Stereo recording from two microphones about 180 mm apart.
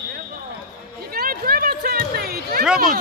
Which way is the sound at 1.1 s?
55° right (ahead or behind).